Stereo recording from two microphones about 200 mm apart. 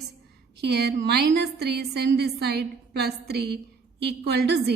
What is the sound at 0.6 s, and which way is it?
A woman's voice, 55° right (ahead or behind).